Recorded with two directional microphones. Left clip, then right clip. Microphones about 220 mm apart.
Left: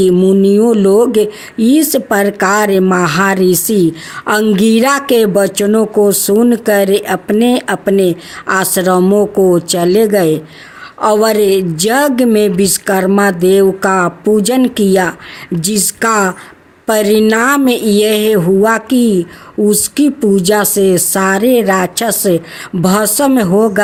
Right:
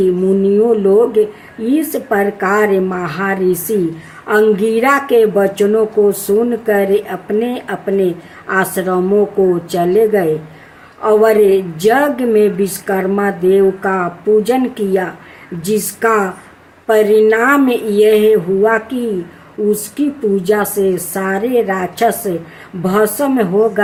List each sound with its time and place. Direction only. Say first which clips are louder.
0.0 s a woman's voice: left 3 dB; 50° left (ahead or behind)